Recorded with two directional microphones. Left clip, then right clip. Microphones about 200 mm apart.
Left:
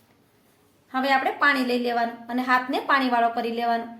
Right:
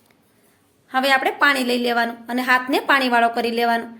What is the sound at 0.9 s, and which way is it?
A woman's voice, 40° right (ahead or behind).